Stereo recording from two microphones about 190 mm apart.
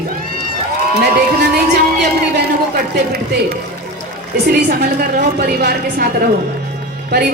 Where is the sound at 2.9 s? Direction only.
55° right (ahead or behind).